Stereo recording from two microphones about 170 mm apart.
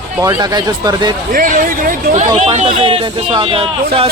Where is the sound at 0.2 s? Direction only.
20° right (ahead or behind).